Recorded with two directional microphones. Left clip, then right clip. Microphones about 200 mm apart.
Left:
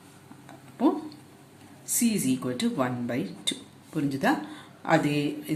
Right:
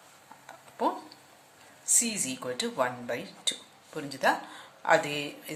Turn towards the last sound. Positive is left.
turn(degrees=-15)  # may be behind; listen again after turning